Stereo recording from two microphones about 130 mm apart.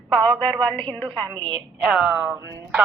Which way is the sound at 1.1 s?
35° right (ahead or behind).